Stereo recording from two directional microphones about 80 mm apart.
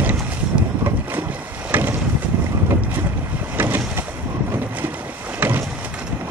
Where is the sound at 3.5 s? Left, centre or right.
Right.